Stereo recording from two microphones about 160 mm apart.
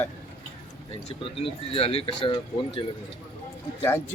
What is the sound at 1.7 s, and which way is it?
Speech, 35° left (ahead or behind).